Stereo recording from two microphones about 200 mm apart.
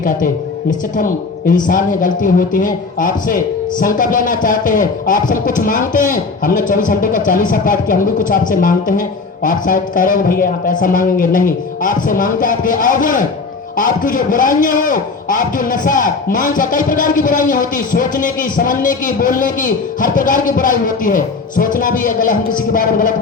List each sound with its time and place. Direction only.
0.9 s a woman's voice: 40° left (ahead or behind)